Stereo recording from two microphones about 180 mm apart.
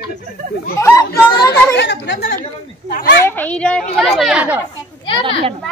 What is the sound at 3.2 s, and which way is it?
A woman's voice, 10° left (ahead or behind).